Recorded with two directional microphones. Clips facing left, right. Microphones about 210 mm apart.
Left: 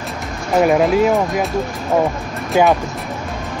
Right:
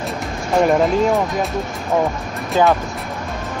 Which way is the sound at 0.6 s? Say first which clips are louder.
Left 2 dB; 5° left (ahead or behind).